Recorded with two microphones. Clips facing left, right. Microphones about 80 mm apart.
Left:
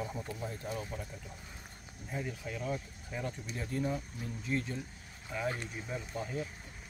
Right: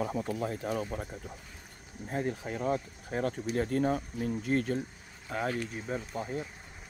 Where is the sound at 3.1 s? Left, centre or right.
Right.